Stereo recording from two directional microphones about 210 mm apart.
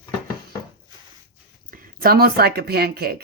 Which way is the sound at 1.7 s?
45° right (ahead or behind).